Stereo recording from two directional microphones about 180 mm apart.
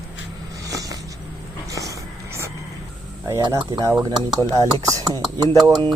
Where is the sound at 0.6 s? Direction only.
20° right (ahead or behind).